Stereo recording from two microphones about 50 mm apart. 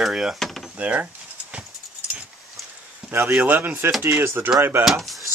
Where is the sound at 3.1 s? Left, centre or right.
Right.